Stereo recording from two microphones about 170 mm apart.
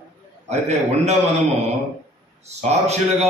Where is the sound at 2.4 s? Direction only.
40° right (ahead or behind).